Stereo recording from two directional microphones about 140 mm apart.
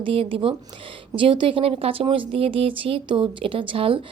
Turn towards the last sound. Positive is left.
turn(degrees=-40)  # may be behind; listen again after turning